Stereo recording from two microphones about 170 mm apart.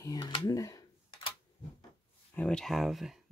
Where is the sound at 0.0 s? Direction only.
25° left (ahead or behind).